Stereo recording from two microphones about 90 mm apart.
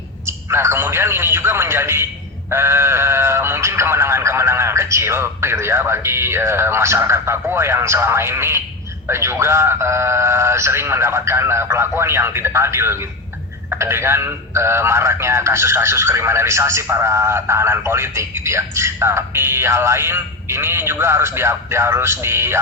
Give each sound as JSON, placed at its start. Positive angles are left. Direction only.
{"t": 0.3, "sound": "a man's voice", "side_deg": -30}